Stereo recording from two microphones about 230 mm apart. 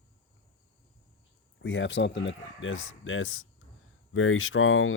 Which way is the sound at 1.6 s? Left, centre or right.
Left.